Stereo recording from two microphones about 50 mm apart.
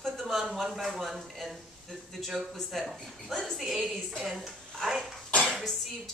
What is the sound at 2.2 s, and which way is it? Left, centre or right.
A woman's voice, centre.